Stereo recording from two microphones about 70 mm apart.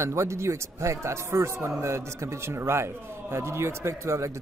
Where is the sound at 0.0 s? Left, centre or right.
Right.